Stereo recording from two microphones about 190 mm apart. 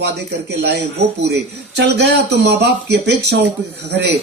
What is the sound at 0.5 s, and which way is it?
Speech, 60° right (ahead or behind).